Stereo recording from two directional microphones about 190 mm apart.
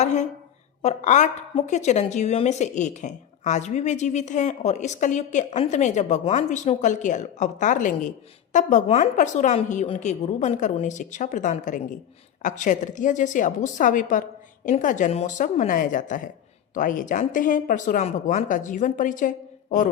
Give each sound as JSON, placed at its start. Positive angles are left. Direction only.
{"t": 0.0, "sound": "a woman's voice", "side_deg": 40}